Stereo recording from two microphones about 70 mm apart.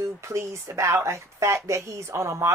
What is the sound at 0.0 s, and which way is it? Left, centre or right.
Speech, right.